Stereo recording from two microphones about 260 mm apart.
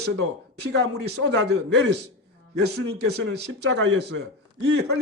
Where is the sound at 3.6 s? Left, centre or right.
Right.